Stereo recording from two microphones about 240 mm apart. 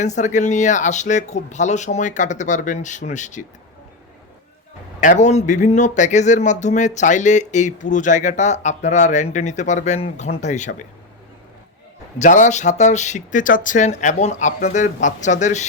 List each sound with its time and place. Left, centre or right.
0.0 s speech: left
4.9 s a man's voice: left
12.2 s a man's voice: left